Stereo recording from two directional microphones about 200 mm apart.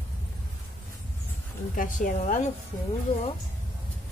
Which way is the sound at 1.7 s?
40° left (ahead or behind).